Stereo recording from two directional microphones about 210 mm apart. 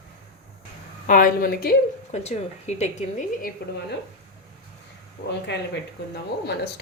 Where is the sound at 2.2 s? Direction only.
30° left (ahead or behind).